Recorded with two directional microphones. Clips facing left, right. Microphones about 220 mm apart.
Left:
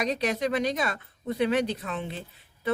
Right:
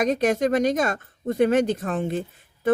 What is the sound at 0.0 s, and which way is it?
Speech, 50° right (ahead or behind).